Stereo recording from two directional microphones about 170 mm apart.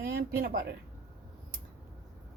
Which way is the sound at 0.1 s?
65° right (ahead or behind).